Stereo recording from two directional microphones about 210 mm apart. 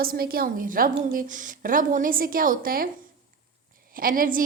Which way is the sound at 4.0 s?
40° right (ahead or behind).